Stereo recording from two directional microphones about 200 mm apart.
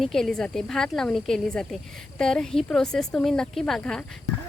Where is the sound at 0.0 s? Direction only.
Centre (ahead or behind).